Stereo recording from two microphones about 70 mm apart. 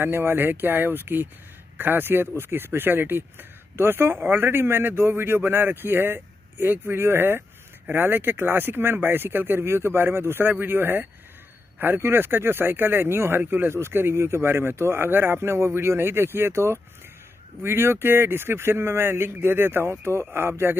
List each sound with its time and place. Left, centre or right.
0.0 s speech: right